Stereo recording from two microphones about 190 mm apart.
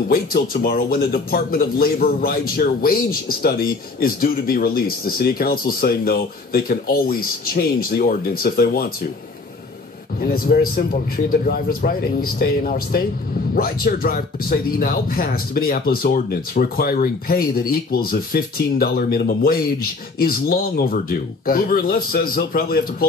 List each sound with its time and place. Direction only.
0.1 s speech: 50° left (ahead or behind)
10.2 s speech: 50° left (ahead or behind)